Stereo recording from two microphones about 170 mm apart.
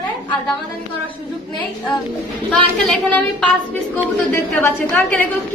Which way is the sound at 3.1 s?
10° left (ahead or behind).